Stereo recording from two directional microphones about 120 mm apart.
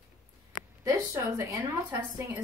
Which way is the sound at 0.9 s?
25° right (ahead or behind).